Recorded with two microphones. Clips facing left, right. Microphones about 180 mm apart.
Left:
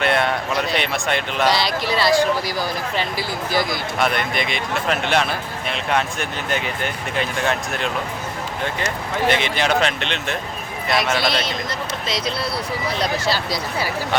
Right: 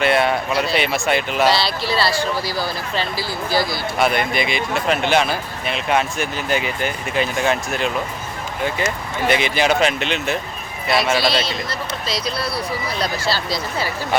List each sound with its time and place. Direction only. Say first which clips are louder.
0.0 s speech: right 2 dB; 5° right (ahead or behind)
1.5 s speech: even; 15° left (ahead or behind)
3.9 s speech: right 3 dB; 5° right (ahead or behind)
9.3 s speech: right 4 dB; 5° right (ahead or behind)
12.0 s speech: even; 20° left (ahead or behind)